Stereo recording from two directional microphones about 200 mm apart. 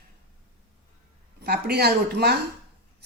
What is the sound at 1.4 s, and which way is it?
Speech, 55° right (ahead or behind).